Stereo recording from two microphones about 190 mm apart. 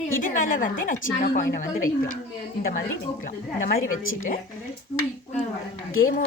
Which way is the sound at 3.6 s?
50° left (ahead or behind).